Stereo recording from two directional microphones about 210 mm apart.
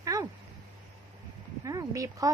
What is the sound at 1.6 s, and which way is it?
Speech, 15° right (ahead or behind).